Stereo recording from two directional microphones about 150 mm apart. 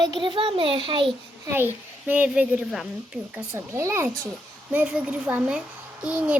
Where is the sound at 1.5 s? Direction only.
15° right (ahead or behind).